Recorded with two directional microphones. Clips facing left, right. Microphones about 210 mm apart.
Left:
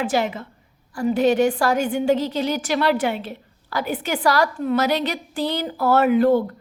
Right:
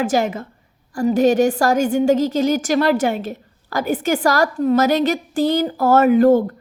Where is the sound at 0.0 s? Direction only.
45° right (ahead or behind).